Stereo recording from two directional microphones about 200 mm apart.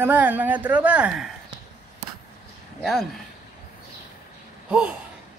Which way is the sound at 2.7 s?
Centre (ahead or behind).